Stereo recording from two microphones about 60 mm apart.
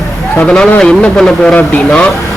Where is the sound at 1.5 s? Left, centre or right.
Left.